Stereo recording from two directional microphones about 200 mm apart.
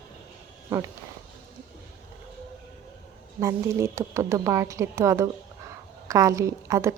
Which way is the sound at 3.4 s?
15° right (ahead or behind).